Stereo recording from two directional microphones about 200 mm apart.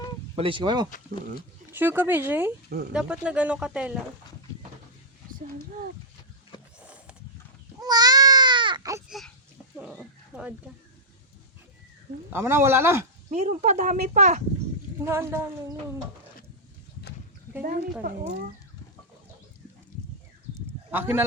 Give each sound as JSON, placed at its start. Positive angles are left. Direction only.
{"t": 0.3, "sound": "speech", "side_deg": -25}
{"t": 0.9, "sound": "speech", "side_deg": 40}
{"t": 1.7, "sound": "speech", "side_deg": -10}
{"t": 6.7, "sound": "a sound", "side_deg": -5}
{"t": 7.8, "sound": "baby cry", "side_deg": -20}
{"t": 9.0, "sound": "a sound", "side_deg": 0}
{"t": 9.7, "sound": "wild animals", "side_deg": -5}
{"t": 12.3, "sound": "speech", "side_deg": -10}
{"t": 13.3, "sound": "speech", "side_deg": -35}
{"t": 15.0, "sound": "speech", "side_deg": -10}
{"t": 18.0, "sound": "speech", "side_deg": -50}
{"t": 20.9, "sound": "speech", "side_deg": -10}